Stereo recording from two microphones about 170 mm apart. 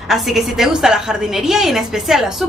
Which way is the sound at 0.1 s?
Centre (ahead or behind).